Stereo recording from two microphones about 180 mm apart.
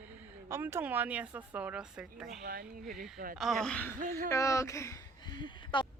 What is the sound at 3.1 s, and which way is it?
Speech, 50° right (ahead or behind).